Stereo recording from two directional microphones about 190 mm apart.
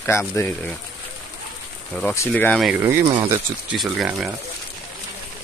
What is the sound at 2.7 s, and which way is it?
Speech, 10° right (ahead or behind).